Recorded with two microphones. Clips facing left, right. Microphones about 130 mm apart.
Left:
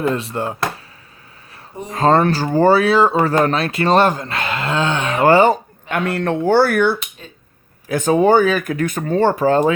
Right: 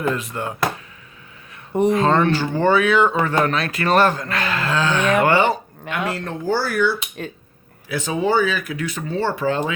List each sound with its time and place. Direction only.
0.0 s speech: 30° left (ahead or behind)
2.0 s speech: 35° left (ahead or behind)
5.9 s speech: 60° left (ahead or behind); by 9.7 s 40° left (ahead or behind)